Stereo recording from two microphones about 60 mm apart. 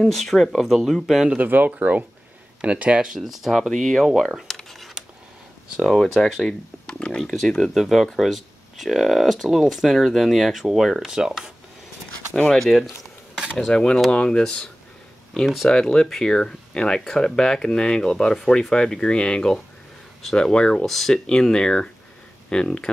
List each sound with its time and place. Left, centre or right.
0.0 s speech: centre
1.3 s speech: right
3.2 s speech: centre
4.0 s speech: centre
4.5 s a sound: centre
6.2 s speech: centre
6.9 s speech: centre
12.4 s speech: centre
13.3 s cutlery: centre
13.7 s speech: centre